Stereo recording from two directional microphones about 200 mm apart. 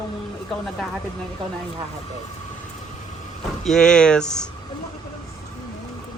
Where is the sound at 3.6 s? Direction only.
Centre (ahead or behind).